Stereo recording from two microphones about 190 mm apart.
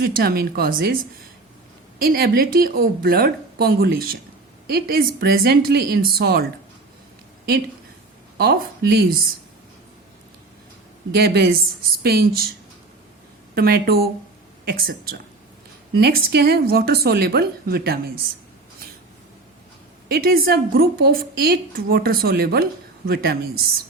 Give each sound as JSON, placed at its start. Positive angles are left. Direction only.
{"t": 0.0, "sound": "a woman's voice", "side_deg": -55}
{"t": 2.0, "sound": "a woman's voice", "side_deg": -50}
{"t": 8.4, "sound": "a woman's voice", "side_deg": -55}
{"t": 11.1, "sound": "a woman's voice", "side_deg": -60}
{"t": 13.6, "sound": "a woman's voice", "side_deg": -55}
{"t": 20.1, "sound": "a woman's voice", "side_deg": -55}